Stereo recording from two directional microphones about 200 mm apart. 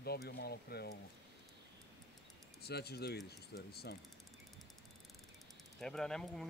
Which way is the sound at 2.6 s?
55° left (ahead or behind).